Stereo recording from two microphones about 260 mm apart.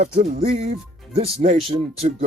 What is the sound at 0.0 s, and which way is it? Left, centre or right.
Speech, right.